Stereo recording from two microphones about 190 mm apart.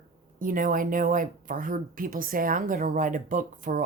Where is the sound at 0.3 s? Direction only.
45° right (ahead or behind).